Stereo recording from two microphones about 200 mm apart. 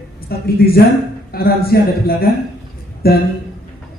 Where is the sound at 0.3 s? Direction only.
50° left (ahead or behind).